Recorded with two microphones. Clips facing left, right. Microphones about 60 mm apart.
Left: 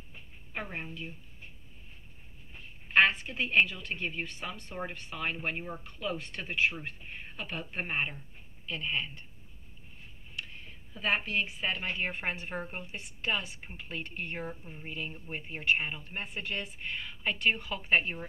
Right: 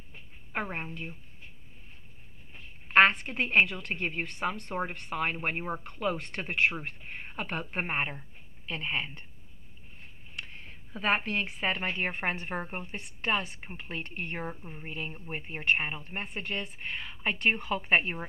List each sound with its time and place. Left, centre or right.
0.5 s a woman's voice: right
2.9 s a sound: right
3.6 s speech: right
5.1 s speech: right
10.9 s speech: right
12.9 s speech: right
15.6 s speech: right